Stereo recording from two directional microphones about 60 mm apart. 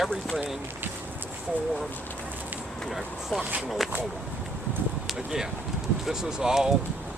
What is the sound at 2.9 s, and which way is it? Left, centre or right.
Speech, centre.